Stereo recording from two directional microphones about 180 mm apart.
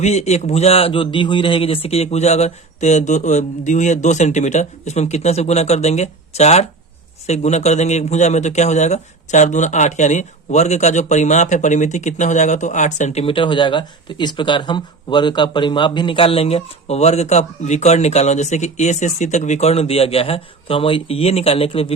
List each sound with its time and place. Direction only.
0.0 s speech: 40° left (ahead or behind)